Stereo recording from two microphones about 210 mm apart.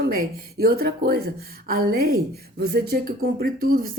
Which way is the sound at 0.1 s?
45° right (ahead or behind).